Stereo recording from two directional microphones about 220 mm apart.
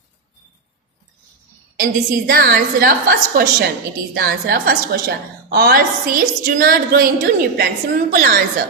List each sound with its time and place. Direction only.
1.8 s a woman's voice: 40° right (ahead or behind)